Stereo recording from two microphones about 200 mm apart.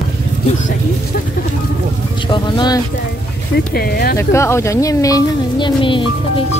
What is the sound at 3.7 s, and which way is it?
Speech, 50° left (ahead or behind).